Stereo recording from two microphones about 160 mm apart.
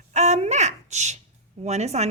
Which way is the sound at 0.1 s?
45° right (ahead or behind).